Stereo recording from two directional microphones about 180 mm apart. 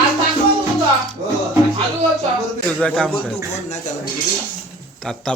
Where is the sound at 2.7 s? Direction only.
5° left (ahead or behind).